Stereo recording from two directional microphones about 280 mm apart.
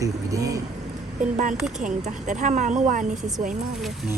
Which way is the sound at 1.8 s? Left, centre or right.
Right.